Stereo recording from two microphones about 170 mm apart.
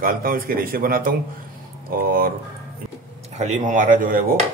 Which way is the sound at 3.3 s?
45° right (ahead or behind).